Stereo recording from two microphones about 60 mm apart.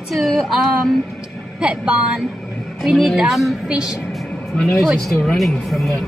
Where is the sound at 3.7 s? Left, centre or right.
Centre.